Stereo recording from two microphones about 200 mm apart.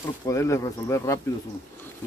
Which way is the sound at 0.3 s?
15° left (ahead or behind).